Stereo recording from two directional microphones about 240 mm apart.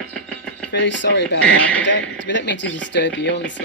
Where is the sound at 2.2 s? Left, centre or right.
Left.